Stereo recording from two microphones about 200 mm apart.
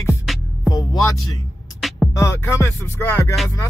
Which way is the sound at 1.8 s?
Centre (ahead or behind).